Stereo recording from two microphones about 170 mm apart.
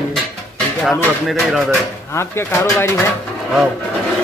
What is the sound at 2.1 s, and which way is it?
Speech, 15° left (ahead or behind).